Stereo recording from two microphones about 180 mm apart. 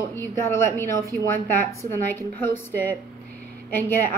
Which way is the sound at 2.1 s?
10° left (ahead or behind).